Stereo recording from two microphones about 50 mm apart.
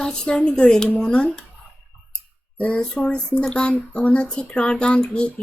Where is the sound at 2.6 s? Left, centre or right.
Left.